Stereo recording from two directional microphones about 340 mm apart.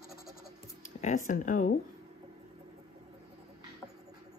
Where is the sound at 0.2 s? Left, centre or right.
Left.